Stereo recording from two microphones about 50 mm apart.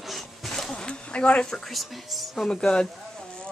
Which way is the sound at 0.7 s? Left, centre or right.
Centre.